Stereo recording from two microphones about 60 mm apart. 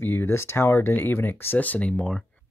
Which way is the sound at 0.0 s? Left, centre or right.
Left.